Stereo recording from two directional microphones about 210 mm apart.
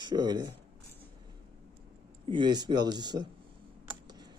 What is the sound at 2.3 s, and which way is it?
Speech, 20° right (ahead or behind).